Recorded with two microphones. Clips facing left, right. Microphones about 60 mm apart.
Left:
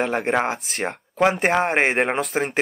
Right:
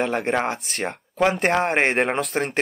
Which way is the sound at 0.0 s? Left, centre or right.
Centre.